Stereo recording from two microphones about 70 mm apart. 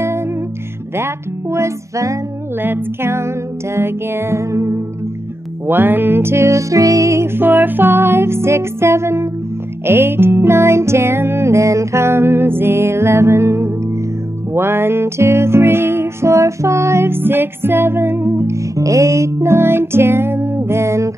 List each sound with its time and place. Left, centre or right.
0.9 s speech: right
2.6 s music: right
5.7 s music: right